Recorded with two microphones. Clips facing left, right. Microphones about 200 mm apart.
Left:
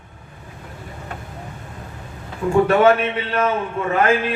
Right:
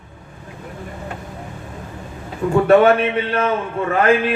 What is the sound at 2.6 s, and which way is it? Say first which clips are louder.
Speech: right 5 dB; 30° right (ahead or behind).